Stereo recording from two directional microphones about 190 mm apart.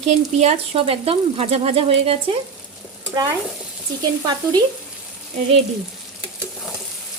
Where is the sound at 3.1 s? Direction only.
20° right (ahead or behind).